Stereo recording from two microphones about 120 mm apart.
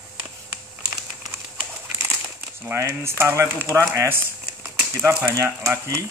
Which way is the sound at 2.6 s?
20° right (ahead or behind).